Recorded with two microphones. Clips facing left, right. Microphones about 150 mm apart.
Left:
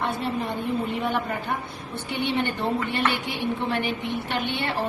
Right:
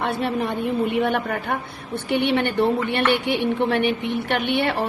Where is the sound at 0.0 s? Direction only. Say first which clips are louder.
Right 4 dB; 70° right (ahead or behind).